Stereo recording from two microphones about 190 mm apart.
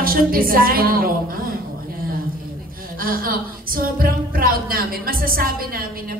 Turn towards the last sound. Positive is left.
turn(degrees=-50)  # may be behind; listen again after turning